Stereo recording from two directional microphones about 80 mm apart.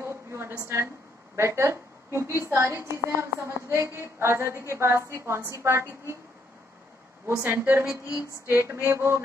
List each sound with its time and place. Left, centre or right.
0.0 s a sound: right
0.6 s a woman's voice: right
7.4 s a woman's voice: right